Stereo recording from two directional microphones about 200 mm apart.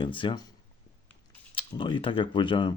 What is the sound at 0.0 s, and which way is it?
Speech, 25° left (ahead or behind).